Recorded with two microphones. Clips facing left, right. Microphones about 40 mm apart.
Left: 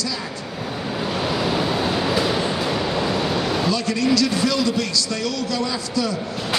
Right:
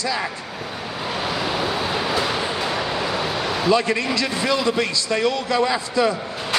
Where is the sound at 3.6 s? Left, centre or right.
Right.